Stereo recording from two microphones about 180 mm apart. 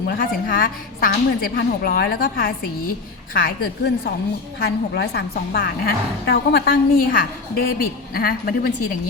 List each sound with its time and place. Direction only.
0.2 s a woman's voice: 50° left (ahead or behind)